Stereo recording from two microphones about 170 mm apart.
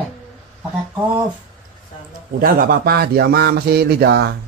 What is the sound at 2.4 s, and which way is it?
Speech, 60° right (ahead or behind).